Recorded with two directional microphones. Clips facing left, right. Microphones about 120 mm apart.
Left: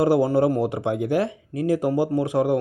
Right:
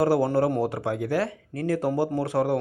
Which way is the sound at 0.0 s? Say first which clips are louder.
Left 3 dB; 20° left (ahead or behind).